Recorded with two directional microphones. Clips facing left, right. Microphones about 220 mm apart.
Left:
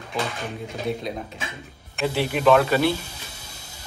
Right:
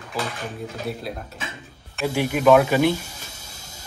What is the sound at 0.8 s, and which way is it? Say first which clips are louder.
Speech: left 6 dB; 5° right (ahead or behind).